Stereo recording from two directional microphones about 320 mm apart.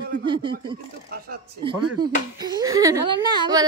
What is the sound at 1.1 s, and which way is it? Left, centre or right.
Speech, right.